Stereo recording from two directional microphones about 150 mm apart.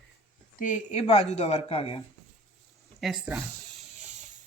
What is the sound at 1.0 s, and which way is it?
Speech, 45° left (ahead or behind).